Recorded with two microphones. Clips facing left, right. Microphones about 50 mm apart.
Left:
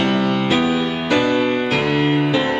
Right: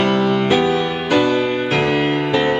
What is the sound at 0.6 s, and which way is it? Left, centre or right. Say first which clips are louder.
Music: right 1 dB; centre.